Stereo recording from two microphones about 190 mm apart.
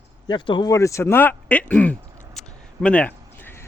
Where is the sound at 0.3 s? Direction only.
25° left (ahead or behind).